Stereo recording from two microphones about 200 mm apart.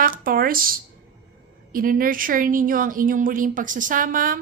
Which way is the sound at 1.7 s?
45° right (ahead or behind).